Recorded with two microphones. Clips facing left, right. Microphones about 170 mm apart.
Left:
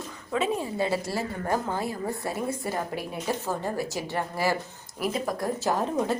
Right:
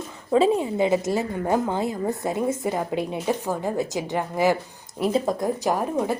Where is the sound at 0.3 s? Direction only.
30° right (ahead or behind).